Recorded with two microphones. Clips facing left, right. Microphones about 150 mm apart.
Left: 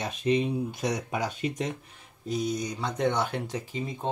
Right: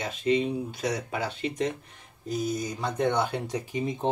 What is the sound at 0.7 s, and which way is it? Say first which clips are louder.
Speech: even; 20° left (ahead or behind).